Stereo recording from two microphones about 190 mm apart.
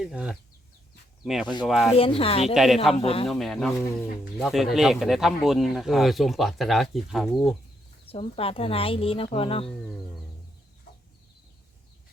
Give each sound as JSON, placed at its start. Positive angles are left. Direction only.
{"t": 0.1, "sound": "speech", "side_deg": -5}
{"t": 1.9, "sound": "speech", "side_deg": 30}
{"t": 3.2, "sound": "speech", "side_deg": 0}
{"t": 8.0, "sound": "speech", "side_deg": 30}